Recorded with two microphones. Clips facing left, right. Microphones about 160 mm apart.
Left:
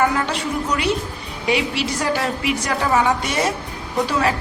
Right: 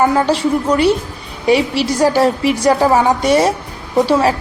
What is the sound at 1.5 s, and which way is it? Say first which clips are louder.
A woman's voice: right 7 dB; 35° right (ahead or behind).